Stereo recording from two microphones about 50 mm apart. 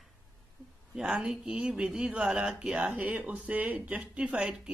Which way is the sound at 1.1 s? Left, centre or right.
Centre.